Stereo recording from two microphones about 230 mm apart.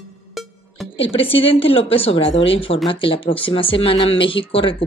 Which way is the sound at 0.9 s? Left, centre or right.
Left.